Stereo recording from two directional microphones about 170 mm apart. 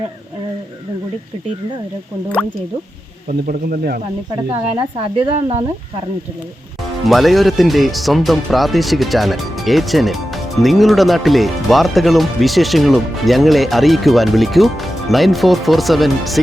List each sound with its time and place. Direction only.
3.2 s speech: 55° right (ahead or behind)
4.8 s speech: 35° right (ahead or behind)
7.0 s speech: centre (ahead or behind)